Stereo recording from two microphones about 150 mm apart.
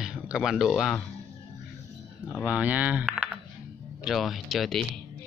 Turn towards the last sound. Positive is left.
turn(degrees=0)  # may be behind; listen again after turning